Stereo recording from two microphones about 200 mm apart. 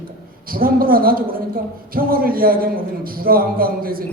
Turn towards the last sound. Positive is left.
turn(degrees=-45)  # may be behind; listen again after turning